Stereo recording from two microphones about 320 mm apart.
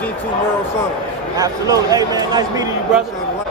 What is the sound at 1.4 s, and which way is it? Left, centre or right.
A man's voice, centre.